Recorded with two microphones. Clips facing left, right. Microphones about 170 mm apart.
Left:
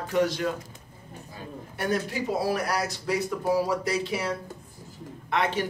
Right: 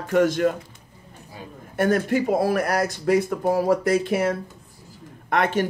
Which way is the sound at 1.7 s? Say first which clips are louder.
Right 8 dB; 50° right (ahead or behind).